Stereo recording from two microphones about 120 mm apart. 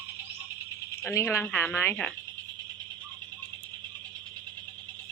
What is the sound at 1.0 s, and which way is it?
Speech, 20° left (ahead or behind).